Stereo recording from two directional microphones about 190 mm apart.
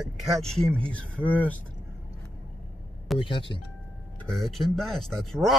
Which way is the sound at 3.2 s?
25° left (ahead or behind).